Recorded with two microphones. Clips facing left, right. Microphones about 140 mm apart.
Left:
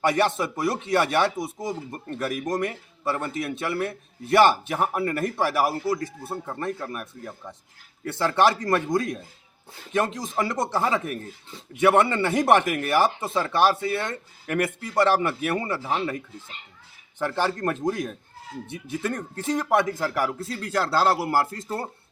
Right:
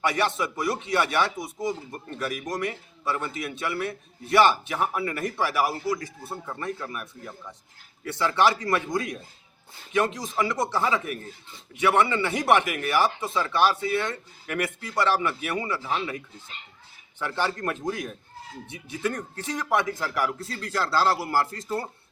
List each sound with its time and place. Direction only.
0.0 s speech: 45° left (ahead or behind)
5.9 s speech: 35° left (ahead or behind); by 21.2 s 50° left (ahead or behind)